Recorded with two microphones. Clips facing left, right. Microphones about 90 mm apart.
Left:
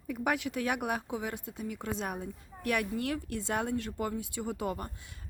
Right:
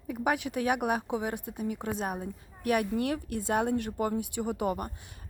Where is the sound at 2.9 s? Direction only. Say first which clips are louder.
Right 3 dB; 20° right (ahead or behind).